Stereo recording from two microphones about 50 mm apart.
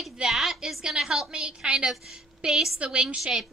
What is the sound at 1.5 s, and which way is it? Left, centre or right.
Speech, right.